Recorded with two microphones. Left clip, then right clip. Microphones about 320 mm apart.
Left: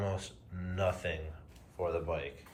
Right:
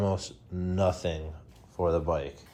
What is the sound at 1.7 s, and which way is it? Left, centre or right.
Speech, right.